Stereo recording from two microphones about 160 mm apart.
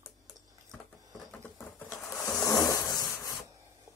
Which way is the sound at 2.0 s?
20° left (ahead or behind).